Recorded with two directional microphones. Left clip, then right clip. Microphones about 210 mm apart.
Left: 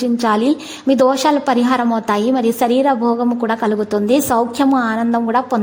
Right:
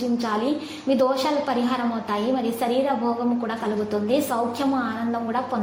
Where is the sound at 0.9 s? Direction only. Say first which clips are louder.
Left 8 dB; 45° left (ahead or behind).